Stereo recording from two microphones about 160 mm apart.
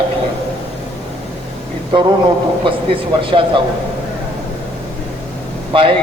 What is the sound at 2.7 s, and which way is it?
Speech, 30° right (ahead or behind).